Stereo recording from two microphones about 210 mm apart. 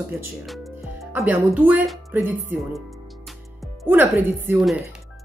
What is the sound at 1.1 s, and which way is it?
Speech, 10° right (ahead or behind).